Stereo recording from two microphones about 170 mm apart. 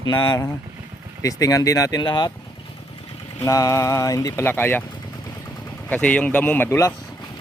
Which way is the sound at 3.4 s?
20° left (ahead or behind).